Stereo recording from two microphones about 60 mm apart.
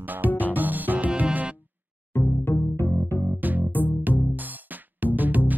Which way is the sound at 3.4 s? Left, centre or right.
Right.